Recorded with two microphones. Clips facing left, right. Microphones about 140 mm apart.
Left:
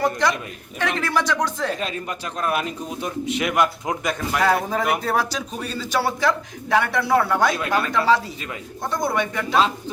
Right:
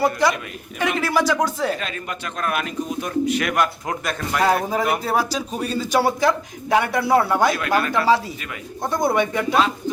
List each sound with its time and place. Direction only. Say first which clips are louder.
0.0 s a man's voice: right 2 dB; 10° right (ahead or behind)
2.4 s speech: even; 30° left (ahead or behind)
4.4 s a man's voice: right 1 dB; 10° right (ahead or behind)